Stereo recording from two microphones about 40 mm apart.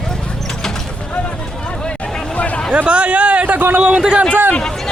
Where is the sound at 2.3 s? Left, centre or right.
Left.